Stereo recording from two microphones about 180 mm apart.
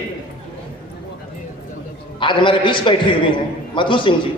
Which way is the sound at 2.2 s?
25° left (ahead or behind).